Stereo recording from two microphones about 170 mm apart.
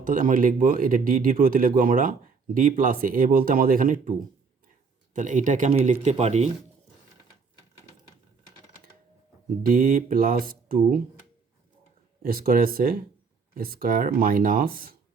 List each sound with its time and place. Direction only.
0.0 s speech: 55° right (ahead or behind)
5.1 s speech: 50° right (ahead or behind)
9.6 s speech: 55° right (ahead or behind)
12.2 s speech: 60° right (ahead or behind)